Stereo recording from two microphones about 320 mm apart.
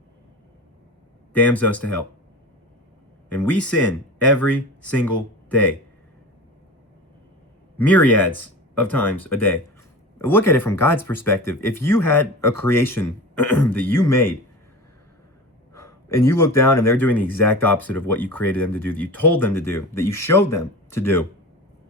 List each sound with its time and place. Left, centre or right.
1.3 s speech: centre
3.2 s speech: centre
7.8 s speech: centre
15.7 s speech: centre